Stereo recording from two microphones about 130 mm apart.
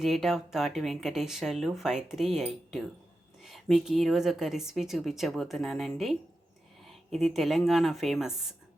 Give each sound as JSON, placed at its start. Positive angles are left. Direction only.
{"t": 0.0, "sound": "speech", "side_deg": 0}